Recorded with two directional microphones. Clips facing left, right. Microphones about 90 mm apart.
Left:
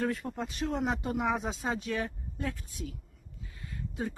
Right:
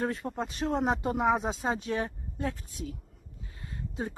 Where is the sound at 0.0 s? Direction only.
30° right (ahead or behind).